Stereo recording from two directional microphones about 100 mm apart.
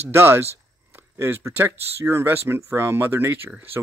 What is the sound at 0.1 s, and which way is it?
Speech, 25° right (ahead or behind).